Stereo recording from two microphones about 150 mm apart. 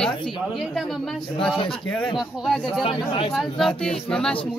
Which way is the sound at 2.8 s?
35° left (ahead or behind).